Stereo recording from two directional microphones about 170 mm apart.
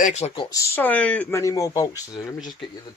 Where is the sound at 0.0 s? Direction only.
40° left (ahead or behind).